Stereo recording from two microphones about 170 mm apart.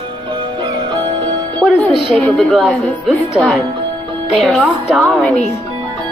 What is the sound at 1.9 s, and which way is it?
Speech, 30° right (ahead or behind).